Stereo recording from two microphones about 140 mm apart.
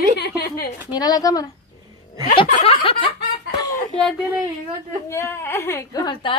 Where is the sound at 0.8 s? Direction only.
30° left (ahead or behind).